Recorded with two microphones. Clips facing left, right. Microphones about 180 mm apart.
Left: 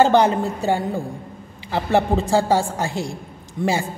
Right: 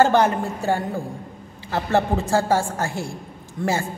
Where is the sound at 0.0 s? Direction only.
20° left (ahead or behind).